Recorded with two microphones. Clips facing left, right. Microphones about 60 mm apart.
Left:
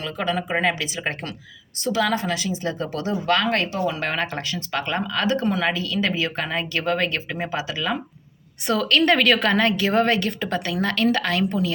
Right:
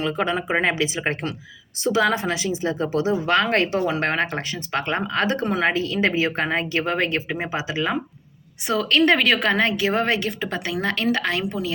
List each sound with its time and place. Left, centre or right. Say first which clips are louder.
0.0 s a woman's voice: right 2 dB; right